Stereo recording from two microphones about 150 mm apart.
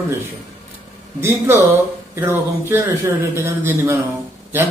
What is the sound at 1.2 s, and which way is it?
Speech, 15° right (ahead or behind).